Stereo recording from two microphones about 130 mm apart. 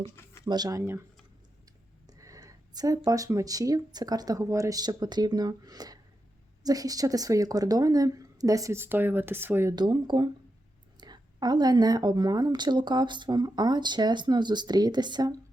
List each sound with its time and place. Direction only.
0.4 s a woman's voice: 30° right (ahead or behind)
0.8 s speech: 20° right (ahead or behind)
2.0 s speech: 25° right (ahead or behind)
9.7 s a woman's voice: 35° right (ahead or behind)